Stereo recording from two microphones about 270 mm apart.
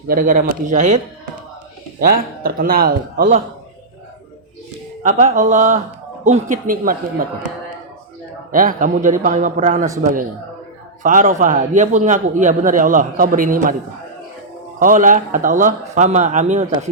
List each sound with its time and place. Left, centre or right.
0.1 s a man's voice: right
2.0 s a man's voice: right
5.0 s a man's voice: right
8.5 s a man's voice: right
14.8 s a man's voice: right